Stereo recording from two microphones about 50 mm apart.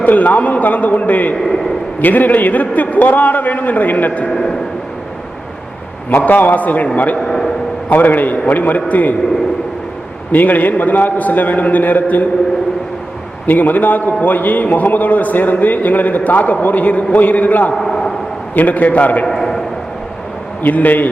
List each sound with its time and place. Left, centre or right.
0.0 s a man's voice: left
6.1 s a man's voice: left
7.2 s a sound: centre
7.9 s a man's voice: left
10.3 s a man's voice: left
13.5 s a man's voice: left
17.7 s a sound: centre
18.5 s a man's voice: left
19.2 s a sound: centre
20.6 s a man's voice: left